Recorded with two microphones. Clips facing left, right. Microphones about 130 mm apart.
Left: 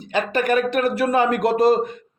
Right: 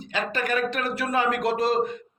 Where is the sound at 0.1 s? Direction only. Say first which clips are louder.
Left 7 dB; 60° left (ahead or behind).